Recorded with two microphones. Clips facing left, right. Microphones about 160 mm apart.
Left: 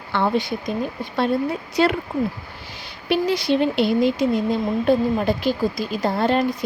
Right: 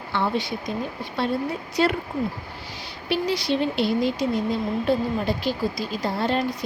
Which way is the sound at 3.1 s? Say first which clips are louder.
Left 4 dB; 55° left (ahead or behind).